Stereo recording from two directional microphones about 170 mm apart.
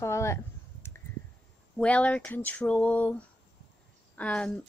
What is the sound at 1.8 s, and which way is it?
A woman's voice, 10° left (ahead or behind).